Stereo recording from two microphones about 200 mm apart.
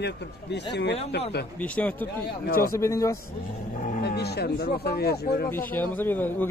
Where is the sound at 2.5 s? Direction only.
45° left (ahead or behind).